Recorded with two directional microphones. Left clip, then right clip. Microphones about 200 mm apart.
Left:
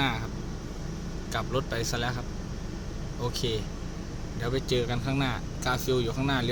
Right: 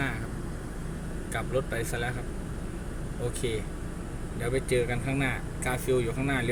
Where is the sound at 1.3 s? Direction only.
25° left (ahead or behind).